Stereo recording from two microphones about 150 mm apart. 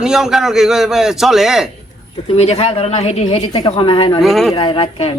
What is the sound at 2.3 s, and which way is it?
A woman's voice, 45° left (ahead or behind).